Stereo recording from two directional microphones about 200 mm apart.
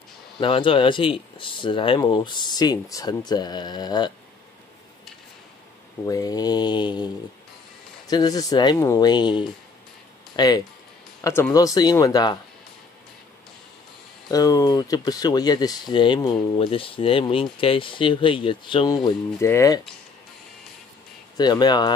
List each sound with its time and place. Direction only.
0.4 s speech: 25° left (ahead or behind)
6.0 s speech: 20° left (ahead or behind)
8.1 s speech: 20° left (ahead or behind)
14.3 s speech: 15° left (ahead or behind)
19.0 s speech: 15° left (ahead or behind)
21.4 s speech: 20° left (ahead or behind)